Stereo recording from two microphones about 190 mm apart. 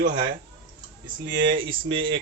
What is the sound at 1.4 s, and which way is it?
Speech, 25° right (ahead or behind).